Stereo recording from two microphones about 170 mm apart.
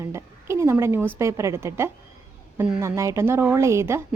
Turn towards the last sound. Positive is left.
turn(degrees=-15)  # may be behind; listen again after turning